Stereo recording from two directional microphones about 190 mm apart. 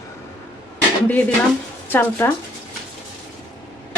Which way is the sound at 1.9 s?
10° left (ahead or behind).